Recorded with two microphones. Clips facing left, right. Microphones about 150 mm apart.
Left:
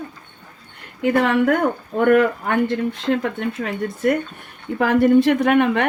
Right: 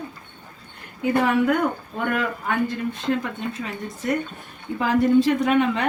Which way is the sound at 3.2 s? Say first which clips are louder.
Left 5 dB; 70° left (ahead or behind).